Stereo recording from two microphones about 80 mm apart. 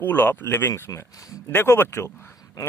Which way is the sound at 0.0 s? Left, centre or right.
Left.